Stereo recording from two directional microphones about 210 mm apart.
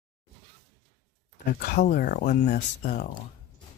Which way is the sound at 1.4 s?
45° left (ahead or behind).